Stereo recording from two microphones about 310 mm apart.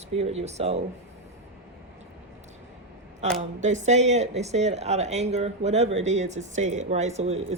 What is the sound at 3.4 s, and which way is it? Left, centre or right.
Speech, right.